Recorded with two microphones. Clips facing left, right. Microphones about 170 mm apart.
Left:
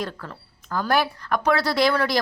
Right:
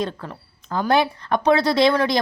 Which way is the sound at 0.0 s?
20° right (ahead or behind).